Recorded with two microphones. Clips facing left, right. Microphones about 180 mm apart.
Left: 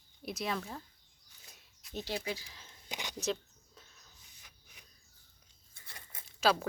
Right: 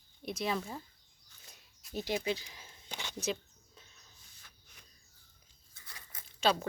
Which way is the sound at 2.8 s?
15° left (ahead or behind).